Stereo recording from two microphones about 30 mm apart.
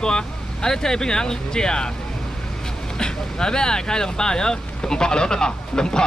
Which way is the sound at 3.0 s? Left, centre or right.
Left.